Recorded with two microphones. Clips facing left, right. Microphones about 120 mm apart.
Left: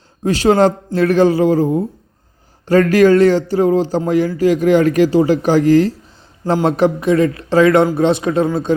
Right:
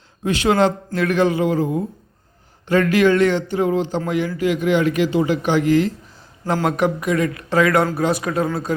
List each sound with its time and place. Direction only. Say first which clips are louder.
0.3 s speech: left 5 dB; 35° left (ahead or behind)